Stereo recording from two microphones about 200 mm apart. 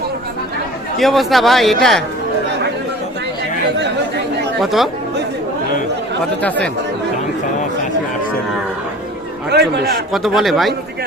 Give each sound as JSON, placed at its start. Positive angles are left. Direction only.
{"t": 0.9, "sound": "a man's voice", "side_deg": 0}
{"t": 4.6, "sound": "a man's voice", "side_deg": 0}
{"t": 9.5, "sound": "a man's voice", "side_deg": -50}
{"t": 10.1, "sound": "a man's voice", "side_deg": 0}